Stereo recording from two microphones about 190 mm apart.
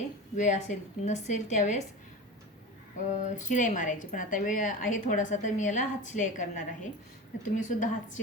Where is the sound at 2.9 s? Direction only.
40° left (ahead or behind).